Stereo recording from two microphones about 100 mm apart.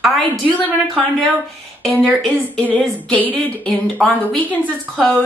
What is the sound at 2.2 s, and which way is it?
A woman's voice, 10° left (ahead or behind).